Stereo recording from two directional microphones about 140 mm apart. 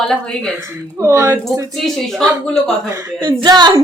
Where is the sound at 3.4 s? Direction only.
30° right (ahead or behind).